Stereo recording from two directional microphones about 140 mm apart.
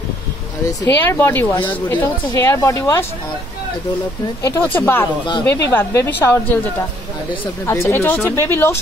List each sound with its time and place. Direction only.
1.0 s speech: 15° left (ahead or behind)
4.4 s speech: 15° left (ahead or behind)